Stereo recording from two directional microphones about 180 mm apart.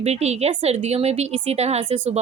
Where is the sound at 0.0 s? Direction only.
35° right (ahead or behind).